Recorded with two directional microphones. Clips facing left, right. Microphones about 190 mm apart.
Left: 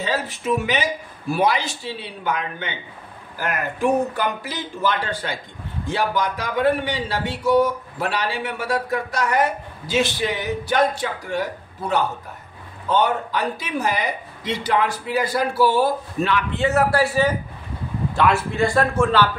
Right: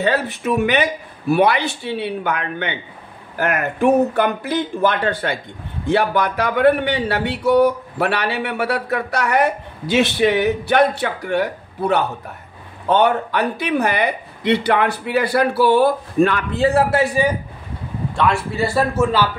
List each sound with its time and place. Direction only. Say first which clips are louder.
0.0 s speech: right 5 dB; 60° right (ahead or behind)
16.6 s a man's voice: right 4 dB; 30° right (ahead or behind)
17.0 s a man's voice: right 2 dB; 15° right (ahead or behind)
18.1 s a man's voice: even; centre (ahead or behind)